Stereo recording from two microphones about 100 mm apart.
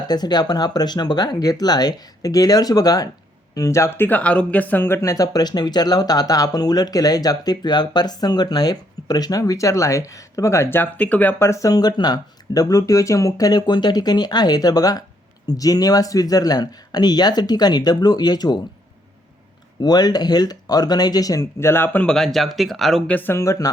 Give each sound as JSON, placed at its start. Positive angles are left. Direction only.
{"t": 0.1, "sound": "speech", "side_deg": 45}
{"t": 5.0, "sound": "speech", "side_deg": 35}
{"t": 19.8, "sound": "speech", "side_deg": 45}
{"t": 21.6, "sound": "speech", "side_deg": 20}
{"t": 22.0, "sound": "speech", "side_deg": 5}
{"t": 23.1, "sound": "speech", "side_deg": 20}
{"t": 23.4, "sound": "speech", "side_deg": 35}